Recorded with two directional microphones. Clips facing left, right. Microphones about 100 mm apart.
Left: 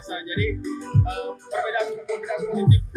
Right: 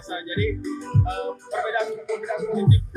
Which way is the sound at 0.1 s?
30° right (ahead or behind).